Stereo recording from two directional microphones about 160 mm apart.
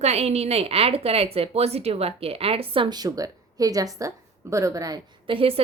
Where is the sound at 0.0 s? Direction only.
40° right (ahead or behind).